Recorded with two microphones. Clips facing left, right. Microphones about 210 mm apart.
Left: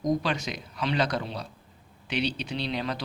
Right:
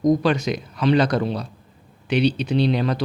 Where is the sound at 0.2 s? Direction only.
50° right (ahead or behind).